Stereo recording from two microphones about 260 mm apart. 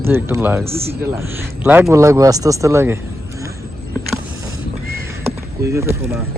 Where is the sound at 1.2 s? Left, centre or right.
Centre.